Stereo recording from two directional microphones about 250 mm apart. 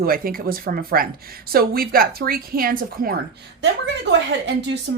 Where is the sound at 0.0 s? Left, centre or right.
Right.